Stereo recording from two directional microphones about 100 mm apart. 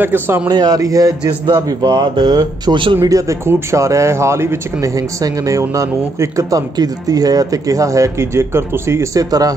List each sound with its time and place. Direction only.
0.0 s a man's voice: 20° right (ahead or behind)
0.5 s speech: 40° right (ahead or behind); by 3.0 s 55° right (ahead or behind)
3.1 s speech: 35° right (ahead or behind)